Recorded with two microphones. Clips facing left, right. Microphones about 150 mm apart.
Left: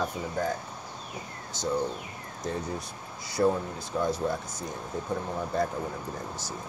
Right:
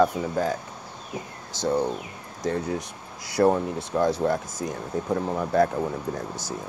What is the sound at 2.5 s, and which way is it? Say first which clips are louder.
Speech: right 6 dB; 75° right (ahead or behind).